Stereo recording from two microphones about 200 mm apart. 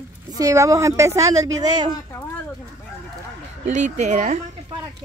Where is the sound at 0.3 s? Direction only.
15° right (ahead or behind).